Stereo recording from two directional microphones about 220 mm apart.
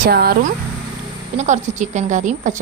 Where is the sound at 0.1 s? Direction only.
45° right (ahead or behind).